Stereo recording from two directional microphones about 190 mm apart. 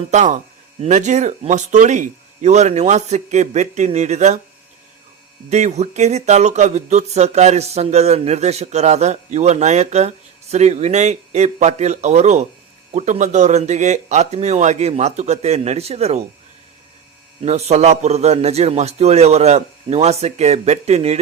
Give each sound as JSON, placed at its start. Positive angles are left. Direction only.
{"t": 0.1, "sound": "speech", "side_deg": -40}
{"t": 5.5, "sound": "speech", "side_deg": -35}
{"t": 17.4, "sound": "speech", "side_deg": -35}